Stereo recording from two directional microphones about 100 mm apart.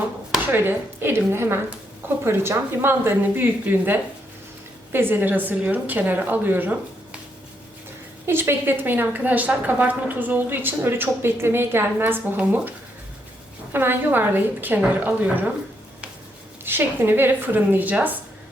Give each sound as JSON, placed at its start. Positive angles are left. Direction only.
{"t": 0.5, "sound": "a woman's voice", "side_deg": -20}
{"t": 8.3, "sound": "a woman's voice", "side_deg": -20}
{"t": 13.7, "sound": "a woman's voice", "side_deg": -20}
{"t": 16.6, "sound": "a woman's voice", "side_deg": -20}